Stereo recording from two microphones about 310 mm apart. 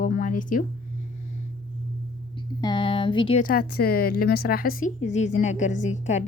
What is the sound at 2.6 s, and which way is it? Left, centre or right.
Speech, centre.